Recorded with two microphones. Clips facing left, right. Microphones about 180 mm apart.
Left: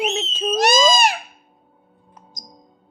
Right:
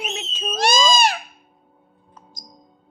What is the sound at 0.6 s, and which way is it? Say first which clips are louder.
Owl: left 2 dB; 45° left (ahead or behind).